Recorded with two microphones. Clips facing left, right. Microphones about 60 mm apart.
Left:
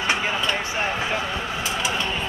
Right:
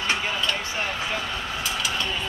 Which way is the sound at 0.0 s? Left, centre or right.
Left.